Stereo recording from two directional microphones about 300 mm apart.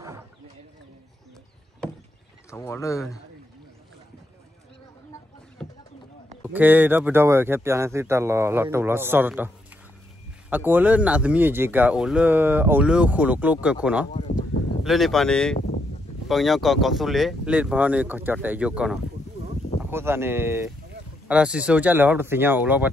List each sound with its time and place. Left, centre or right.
2.5 s speech: centre
5.6 s a sound: centre
6.4 s speech: centre
10.5 s speech: centre
14.1 s a sound: left
14.9 s speech: centre